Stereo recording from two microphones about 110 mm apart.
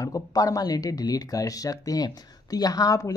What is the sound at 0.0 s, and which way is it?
Speech, 30° left (ahead or behind).